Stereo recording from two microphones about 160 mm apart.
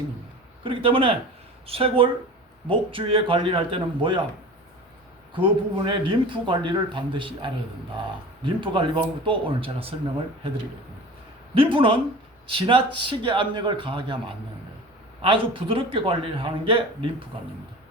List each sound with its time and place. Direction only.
0.6 s speech: 35° right (ahead or behind)
5.3 s speech: 30° right (ahead or behind)
11.5 s speech: 35° right (ahead or behind)